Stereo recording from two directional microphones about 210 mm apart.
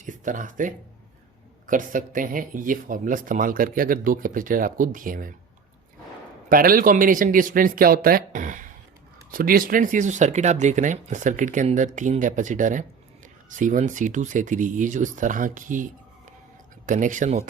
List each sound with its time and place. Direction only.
0.0 s speech: 40° right (ahead or behind)
6.5 s speech: 45° right (ahead or behind)